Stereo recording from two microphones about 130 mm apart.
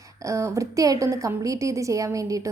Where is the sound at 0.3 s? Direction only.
25° right (ahead or behind).